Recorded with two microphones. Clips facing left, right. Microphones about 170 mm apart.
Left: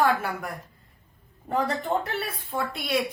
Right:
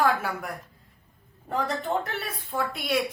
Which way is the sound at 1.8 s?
Centre (ahead or behind).